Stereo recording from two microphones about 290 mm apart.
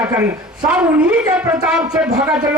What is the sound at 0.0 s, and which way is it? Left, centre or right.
A man's voice, centre.